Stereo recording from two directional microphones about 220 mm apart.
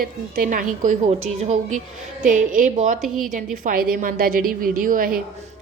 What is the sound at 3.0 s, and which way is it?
Speech, centre (ahead or behind).